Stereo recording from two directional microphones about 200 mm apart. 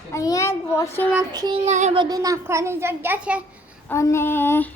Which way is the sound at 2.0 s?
20° right (ahead or behind).